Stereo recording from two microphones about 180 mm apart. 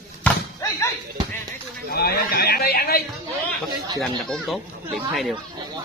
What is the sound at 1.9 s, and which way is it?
Chatter, 60° left (ahead or behind).